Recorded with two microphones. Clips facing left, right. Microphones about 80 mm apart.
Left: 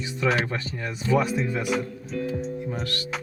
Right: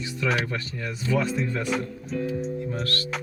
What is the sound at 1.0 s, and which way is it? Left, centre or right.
Speech, left.